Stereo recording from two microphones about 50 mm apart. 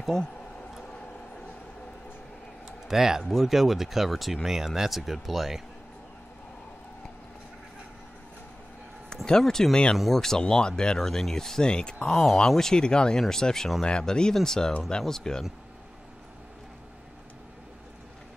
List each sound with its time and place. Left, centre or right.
0.0 s speech: centre
2.9 s speech: centre
9.1 s a sound: centre
9.4 s speech: centre
9.9 s speech: centre
10.4 s speech: centre